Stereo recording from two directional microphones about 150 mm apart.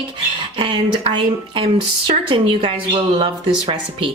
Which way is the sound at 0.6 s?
35° right (ahead or behind).